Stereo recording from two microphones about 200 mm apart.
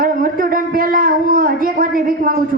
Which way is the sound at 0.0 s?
45° right (ahead or behind).